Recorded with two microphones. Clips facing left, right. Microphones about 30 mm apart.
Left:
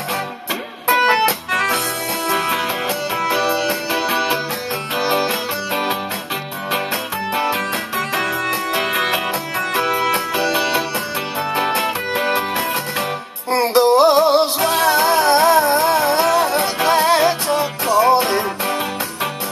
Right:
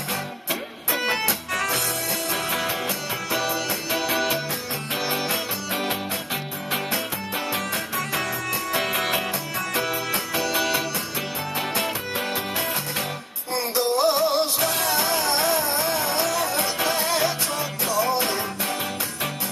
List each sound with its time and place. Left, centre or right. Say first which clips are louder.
0.8 s music: left 10 dB; left
3.3 s music: left 7 dB; left
3.9 s music: left 3 dB; left
5.3 s music: left 6 dB; left
8.7 s music: left 4 dB; left
13.5 s music: left 10 dB; left
14.6 s music: left 8 dB; left